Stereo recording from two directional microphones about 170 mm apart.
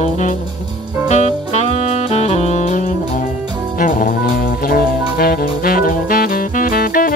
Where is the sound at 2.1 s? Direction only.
40° left (ahead or behind).